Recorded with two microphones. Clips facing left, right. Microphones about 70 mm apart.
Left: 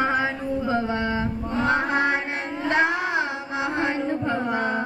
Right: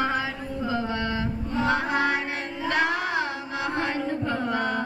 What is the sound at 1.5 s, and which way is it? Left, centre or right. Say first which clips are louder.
Music: left 2 dB; left.